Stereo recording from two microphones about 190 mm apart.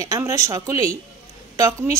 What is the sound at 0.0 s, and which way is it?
A woman's voice, 15° right (ahead or behind).